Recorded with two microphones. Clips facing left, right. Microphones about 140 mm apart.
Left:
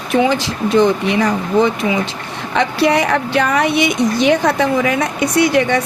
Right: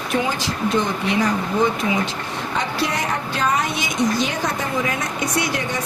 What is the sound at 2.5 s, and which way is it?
Speech, 75° left (ahead or behind).